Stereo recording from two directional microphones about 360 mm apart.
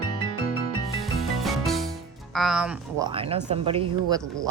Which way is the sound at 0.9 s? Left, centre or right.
Centre.